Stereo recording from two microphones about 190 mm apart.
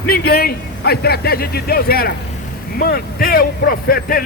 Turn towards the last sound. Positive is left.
turn(degrees=50)  # may be behind; listen again after turning